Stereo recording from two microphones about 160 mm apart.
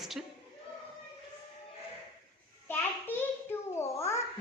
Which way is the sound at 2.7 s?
15° left (ahead or behind).